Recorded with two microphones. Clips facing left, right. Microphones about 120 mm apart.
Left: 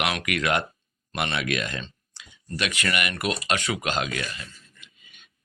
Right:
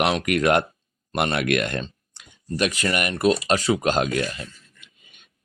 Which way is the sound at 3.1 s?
35° right (ahead or behind).